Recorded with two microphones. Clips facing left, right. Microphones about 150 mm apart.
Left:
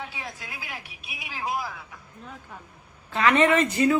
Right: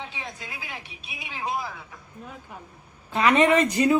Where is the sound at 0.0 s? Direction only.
5° left (ahead or behind).